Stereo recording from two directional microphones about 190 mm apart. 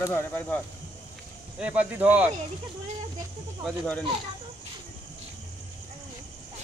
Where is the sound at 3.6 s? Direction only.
5° left (ahead or behind).